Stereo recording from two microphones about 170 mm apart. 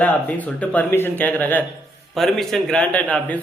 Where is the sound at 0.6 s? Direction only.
10° left (ahead or behind).